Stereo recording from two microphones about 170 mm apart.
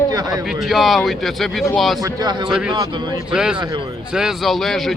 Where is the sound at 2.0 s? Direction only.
25° right (ahead or behind).